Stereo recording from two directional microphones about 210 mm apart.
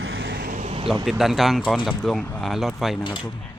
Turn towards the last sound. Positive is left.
turn(degrees=0)  # may be behind; listen again after turning